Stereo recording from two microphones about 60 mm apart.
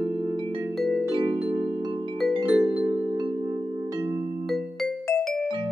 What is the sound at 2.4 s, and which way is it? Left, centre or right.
Music, centre.